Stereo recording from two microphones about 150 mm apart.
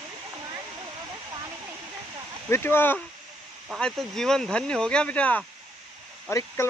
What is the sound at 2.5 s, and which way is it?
Speech, 15° left (ahead or behind).